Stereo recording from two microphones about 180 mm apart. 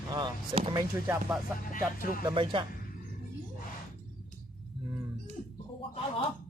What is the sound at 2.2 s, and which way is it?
Speech, 25° right (ahead or behind).